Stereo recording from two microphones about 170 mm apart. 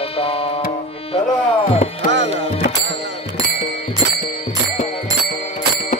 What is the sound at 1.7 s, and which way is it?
Speech, 40° left (ahead or behind).